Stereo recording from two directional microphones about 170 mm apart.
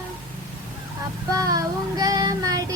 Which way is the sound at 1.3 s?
20° right (ahead or behind).